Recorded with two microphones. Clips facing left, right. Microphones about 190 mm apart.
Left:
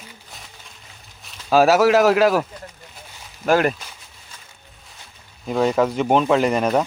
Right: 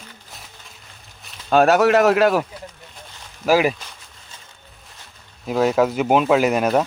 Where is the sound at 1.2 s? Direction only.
Centre (ahead or behind).